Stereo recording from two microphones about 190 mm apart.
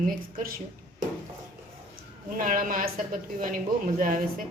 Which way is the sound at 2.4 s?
45° right (ahead or behind).